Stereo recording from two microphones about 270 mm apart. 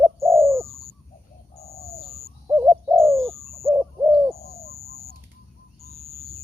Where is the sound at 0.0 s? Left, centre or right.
Centre.